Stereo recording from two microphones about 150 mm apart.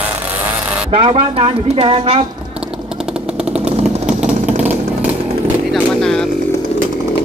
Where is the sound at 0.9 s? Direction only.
35° right (ahead or behind).